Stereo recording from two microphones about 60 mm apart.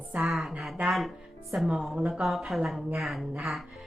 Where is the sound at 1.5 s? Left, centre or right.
Centre.